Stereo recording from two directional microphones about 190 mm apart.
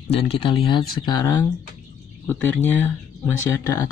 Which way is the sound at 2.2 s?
5° left (ahead or behind).